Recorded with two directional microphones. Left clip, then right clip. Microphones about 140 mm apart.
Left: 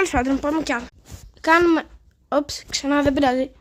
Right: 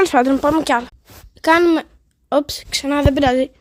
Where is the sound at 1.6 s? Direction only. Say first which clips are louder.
Right 3 dB; 25° right (ahead or behind).